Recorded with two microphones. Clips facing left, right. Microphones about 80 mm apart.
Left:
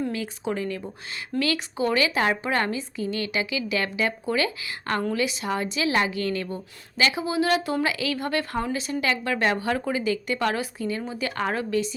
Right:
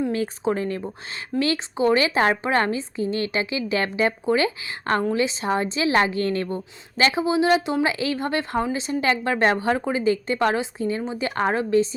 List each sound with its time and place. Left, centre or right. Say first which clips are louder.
0.1 s a woman's voice: right 5 dB; right